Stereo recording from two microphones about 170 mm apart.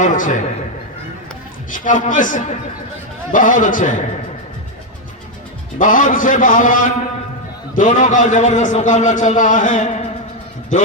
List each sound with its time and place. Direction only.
0.0 s a man's voice: 45° left (ahead or behind)
1.7 s a man's voice: 50° left (ahead or behind)
5.8 s a man's voice: 50° left (ahead or behind)